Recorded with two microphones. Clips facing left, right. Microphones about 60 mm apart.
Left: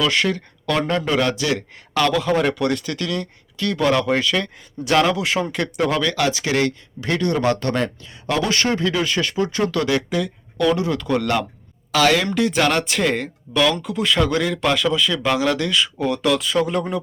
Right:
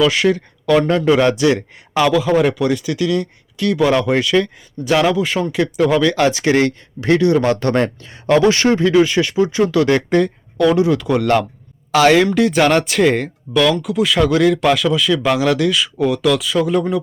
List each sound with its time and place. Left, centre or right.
0.0 s speech: centre
1.2 s speech: right
2.1 s speech: centre
4.9 s speech: centre
6.2 s speech: right
9.8 s speech: right
10.8 s speech: centre
16.2 s speech: centre